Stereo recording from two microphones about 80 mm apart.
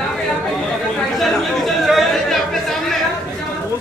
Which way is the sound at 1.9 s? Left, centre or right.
Centre.